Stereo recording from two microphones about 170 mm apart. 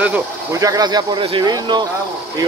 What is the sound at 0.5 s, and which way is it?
Speech, 20° right (ahead or behind).